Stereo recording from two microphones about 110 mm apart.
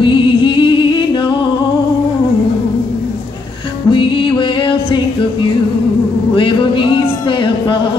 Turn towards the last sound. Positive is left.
turn(degrees=45)  # may be behind; listen again after turning